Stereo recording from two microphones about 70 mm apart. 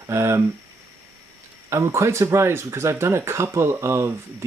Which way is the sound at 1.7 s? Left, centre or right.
Right.